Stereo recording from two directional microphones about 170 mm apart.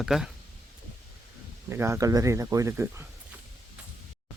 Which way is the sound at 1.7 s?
15° right (ahead or behind).